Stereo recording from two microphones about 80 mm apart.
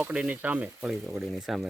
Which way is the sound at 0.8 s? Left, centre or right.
Centre.